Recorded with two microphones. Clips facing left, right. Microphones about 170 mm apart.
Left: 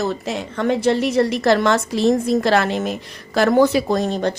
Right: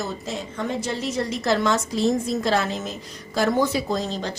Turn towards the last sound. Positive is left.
turn(degrees=60)  # may be behind; listen again after turning